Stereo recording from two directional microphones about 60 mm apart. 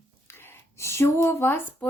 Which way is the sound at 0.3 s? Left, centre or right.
Left.